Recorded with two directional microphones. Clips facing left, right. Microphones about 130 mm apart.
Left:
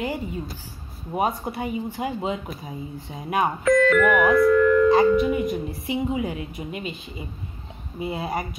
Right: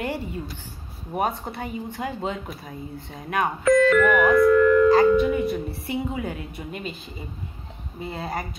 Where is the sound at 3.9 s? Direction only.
30° right (ahead or behind).